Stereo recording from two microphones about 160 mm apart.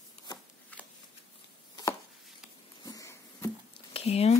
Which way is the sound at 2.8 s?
20° left (ahead or behind).